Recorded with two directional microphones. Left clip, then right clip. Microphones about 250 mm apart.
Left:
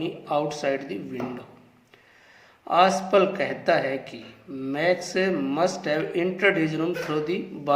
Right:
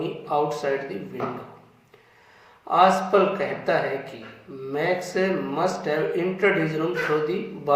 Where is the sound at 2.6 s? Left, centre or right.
Left.